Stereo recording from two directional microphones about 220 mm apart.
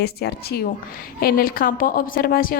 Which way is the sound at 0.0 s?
45° left (ahead or behind).